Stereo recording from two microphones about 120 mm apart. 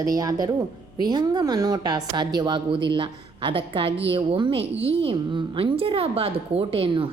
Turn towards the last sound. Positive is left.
turn(degrees=-50)  # may be behind; listen again after turning